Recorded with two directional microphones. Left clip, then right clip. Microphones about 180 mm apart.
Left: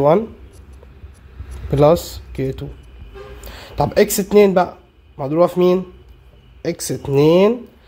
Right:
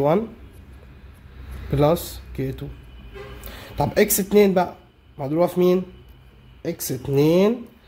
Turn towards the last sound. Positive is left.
turn(degrees=25)  # may be behind; listen again after turning